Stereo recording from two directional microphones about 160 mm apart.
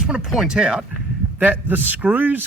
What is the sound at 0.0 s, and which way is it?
A man's voice, 5° right (ahead or behind).